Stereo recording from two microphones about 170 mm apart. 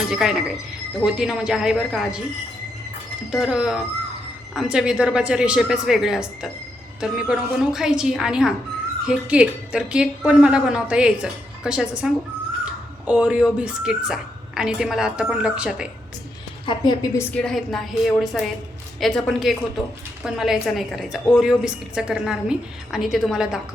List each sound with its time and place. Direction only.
0.1 s a woman's voice: 5° right (ahead or behind)
3.3 s a woman's voice: 5° right (ahead or behind)
16.6 s a woman's voice: 25° left (ahead or behind)
17.2 s a woman's voice: 5° left (ahead or behind)